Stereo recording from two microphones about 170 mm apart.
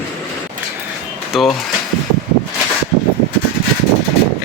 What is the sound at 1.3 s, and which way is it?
Speech, centre (ahead or behind).